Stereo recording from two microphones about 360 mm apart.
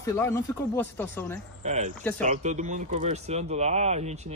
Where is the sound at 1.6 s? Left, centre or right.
Centre.